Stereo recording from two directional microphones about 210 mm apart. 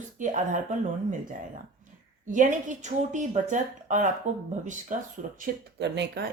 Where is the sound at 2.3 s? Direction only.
35° right (ahead or behind).